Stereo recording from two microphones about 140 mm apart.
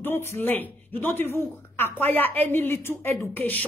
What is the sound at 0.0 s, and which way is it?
A woman's voice, 20° left (ahead or behind).